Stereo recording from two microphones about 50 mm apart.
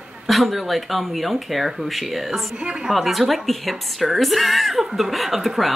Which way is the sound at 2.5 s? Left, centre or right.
Centre.